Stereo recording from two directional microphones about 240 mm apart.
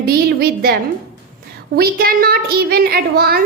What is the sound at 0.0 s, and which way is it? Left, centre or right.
A woman's voice, right.